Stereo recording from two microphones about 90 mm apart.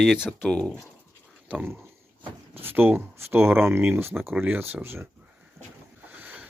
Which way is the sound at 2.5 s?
25° right (ahead or behind).